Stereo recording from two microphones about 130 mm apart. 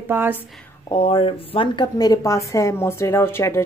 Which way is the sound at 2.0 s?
25° left (ahead or behind).